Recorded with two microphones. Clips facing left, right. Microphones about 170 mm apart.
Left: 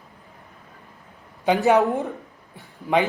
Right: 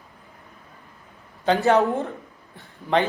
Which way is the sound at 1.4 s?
10° left (ahead or behind).